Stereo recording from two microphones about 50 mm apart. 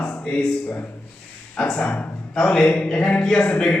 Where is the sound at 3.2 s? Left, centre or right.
Centre.